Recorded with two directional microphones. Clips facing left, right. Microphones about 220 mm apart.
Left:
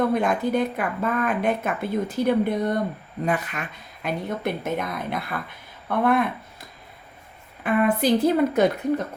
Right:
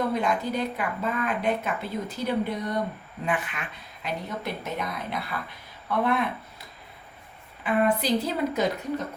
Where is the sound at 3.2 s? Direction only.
40° left (ahead or behind).